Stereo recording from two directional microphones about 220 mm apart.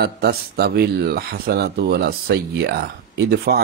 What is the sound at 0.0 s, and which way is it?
Speech, 45° right (ahead or behind).